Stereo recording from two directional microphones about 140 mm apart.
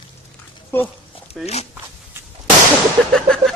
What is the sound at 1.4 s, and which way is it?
Speech, 50° left (ahead or behind).